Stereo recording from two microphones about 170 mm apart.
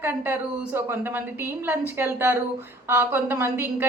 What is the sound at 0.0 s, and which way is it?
A woman's voice, 10° right (ahead or behind).